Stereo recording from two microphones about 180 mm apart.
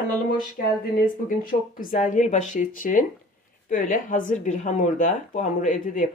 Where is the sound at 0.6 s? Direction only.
50° left (ahead or behind).